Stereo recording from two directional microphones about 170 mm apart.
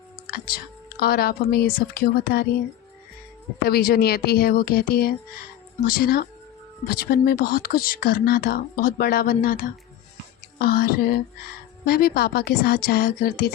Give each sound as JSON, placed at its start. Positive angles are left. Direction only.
{"t": 0.3, "sound": "speech", "side_deg": 65}
{"t": 3.6, "sound": "speech", "side_deg": 65}